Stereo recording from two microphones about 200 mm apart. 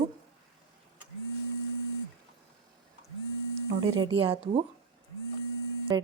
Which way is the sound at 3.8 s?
90° right.